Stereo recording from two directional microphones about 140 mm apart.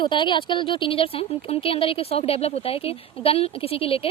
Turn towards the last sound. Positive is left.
turn(degrees=40)  # may be behind; listen again after turning